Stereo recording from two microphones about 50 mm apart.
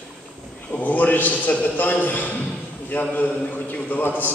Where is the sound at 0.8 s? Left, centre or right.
Left.